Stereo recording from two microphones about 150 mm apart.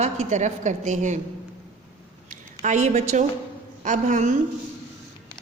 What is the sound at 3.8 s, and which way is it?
Speech, 55° right (ahead or behind).